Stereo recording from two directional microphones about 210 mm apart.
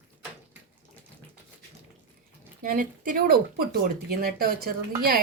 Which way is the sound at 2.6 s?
40° right (ahead or behind).